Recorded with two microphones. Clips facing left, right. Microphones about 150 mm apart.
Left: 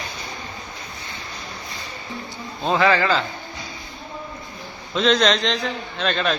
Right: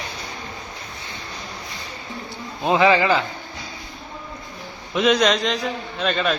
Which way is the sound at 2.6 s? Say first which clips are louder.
Right 2 dB; 20° right (ahead or behind).